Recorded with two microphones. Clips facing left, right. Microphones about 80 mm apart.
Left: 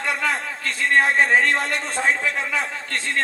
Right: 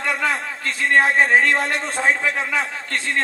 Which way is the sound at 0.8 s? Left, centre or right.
Right.